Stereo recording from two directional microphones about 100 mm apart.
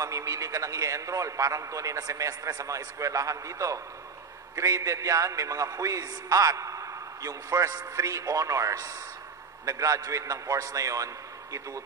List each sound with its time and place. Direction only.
0.0 s a man's voice: 35° right (ahead or behind)